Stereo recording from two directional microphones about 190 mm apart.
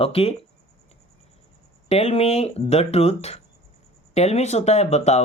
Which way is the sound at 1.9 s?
30° left (ahead or behind).